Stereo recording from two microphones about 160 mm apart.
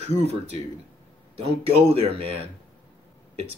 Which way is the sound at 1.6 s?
40° right (ahead or behind).